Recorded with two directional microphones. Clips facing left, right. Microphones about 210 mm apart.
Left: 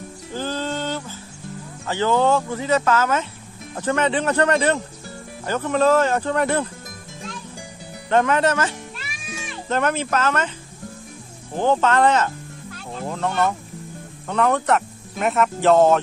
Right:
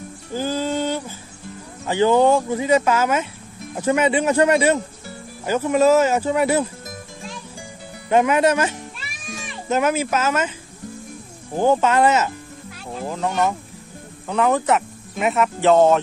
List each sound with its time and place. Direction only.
0.3 s music: 10° right (ahead or behind)
1.9 s speech: 15° right (ahead or behind)
8.1 s speech: 10° right (ahead or behind)
9.0 s cat: 5° right (ahead or behind)
11.5 s speech: 10° right (ahead or behind)